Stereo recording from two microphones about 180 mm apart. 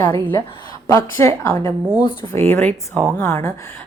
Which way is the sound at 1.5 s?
25° right (ahead or behind).